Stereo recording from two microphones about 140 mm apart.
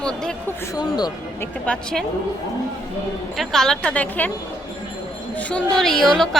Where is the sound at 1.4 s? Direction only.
10° left (ahead or behind).